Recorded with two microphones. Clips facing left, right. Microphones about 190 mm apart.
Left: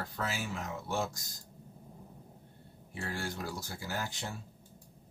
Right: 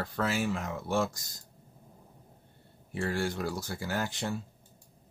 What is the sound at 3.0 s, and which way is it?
Speech, 70° right (ahead or behind).